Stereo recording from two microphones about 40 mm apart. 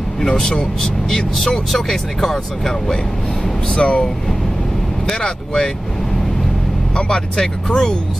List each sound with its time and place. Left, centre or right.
0.2 s speech: centre
1.3 s speech: centre
3.6 s speech: centre
5.0 s speech: centre
7.0 s speech: centre